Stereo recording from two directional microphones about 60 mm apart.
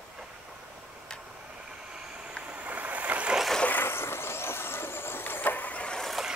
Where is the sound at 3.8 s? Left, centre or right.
Left.